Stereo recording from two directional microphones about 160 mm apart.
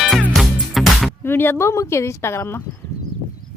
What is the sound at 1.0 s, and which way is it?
Speech, 15° left (ahead or behind).